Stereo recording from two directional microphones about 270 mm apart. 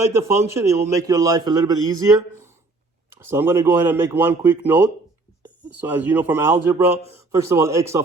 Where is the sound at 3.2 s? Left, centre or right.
Centre.